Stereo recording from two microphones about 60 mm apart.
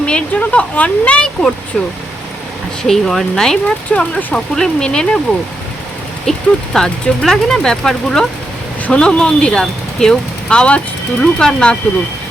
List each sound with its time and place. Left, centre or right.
0.0 s speech: centre
2.8 s speech: centre
6.3 s speech: centre